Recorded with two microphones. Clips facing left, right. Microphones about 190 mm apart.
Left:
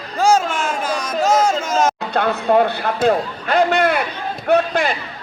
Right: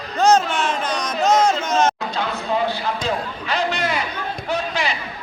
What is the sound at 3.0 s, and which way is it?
A man's voice, 55° left (ahead or behind).